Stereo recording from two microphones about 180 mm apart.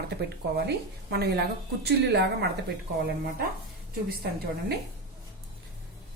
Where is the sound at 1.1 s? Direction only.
65° right (ahead or behind).